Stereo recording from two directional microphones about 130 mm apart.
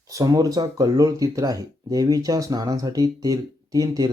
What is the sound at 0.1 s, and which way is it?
Speech, 25° right (ahead or behind).